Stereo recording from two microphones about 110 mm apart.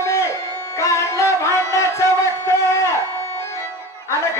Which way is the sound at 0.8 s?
25° left (ahead or behind).